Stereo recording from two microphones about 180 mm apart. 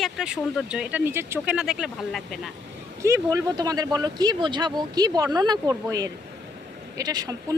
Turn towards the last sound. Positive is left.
turn(degrees=-20)  # may be behind; listen again after turning